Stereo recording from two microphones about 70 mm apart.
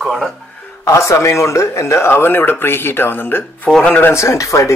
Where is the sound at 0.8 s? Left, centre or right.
Left.